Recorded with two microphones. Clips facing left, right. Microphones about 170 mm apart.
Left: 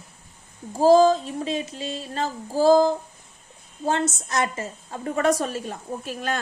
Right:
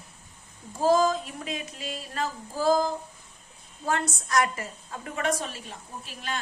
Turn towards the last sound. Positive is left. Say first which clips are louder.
# left 9 dB
turn(degrees=45)  # may be behind; listen again after turning